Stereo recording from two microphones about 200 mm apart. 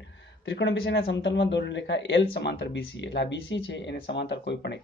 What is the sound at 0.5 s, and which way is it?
Speech, 65° left (ahead or behind).